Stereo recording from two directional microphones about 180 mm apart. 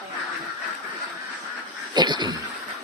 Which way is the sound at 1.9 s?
25° right (ahead or behind).